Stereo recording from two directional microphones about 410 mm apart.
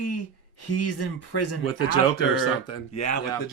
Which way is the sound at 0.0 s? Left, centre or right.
Left.